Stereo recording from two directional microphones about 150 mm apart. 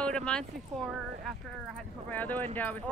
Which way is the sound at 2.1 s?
10° left (ahead or behind).